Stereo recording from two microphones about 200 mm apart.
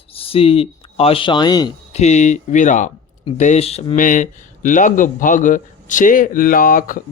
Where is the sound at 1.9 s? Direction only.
35° left (ahead or behind).